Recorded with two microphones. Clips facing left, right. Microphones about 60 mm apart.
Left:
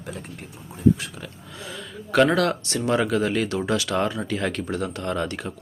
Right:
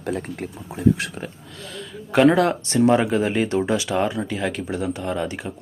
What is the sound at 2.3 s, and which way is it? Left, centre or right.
Speech, right.